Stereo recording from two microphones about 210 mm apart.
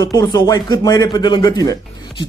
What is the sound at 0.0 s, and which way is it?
Speech, 15° left (ahead or behind).